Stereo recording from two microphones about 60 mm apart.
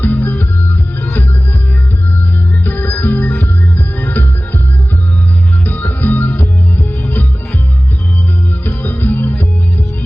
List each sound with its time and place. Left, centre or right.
0.0 s music: left
2.6 s music: left
5.6 s music: left
8.6 s music: left